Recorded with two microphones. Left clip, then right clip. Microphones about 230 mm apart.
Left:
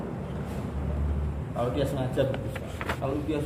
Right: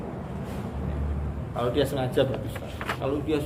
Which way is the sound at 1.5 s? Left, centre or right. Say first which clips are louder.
Right 3 dB; right.